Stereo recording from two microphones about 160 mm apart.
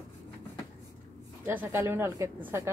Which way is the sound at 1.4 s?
15° right (ahead or behind).